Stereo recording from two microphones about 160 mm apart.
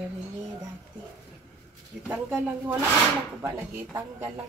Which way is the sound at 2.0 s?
10° right (ahead or behind).